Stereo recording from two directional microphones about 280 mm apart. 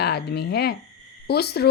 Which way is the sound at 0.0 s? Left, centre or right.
Left.